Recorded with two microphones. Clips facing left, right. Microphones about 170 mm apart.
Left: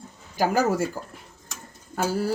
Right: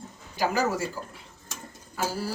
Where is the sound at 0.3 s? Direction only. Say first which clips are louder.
Left 4 dB; 50° left (ahead or behind).